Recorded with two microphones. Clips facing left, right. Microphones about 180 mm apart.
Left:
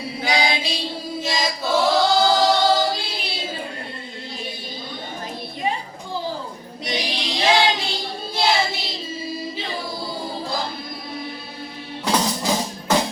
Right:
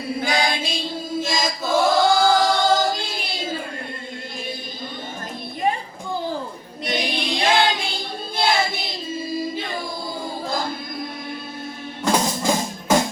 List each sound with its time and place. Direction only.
0.2 s female singing: 50° right (ahead or behind)
1.2 s choir: 50° right (ahead or behind)
5.7 s a sound: 50° right (ahead or behind)
6.8 s female singing: 55° right (ahead or behind)
12.0 s music: 50° right (ahead or behind)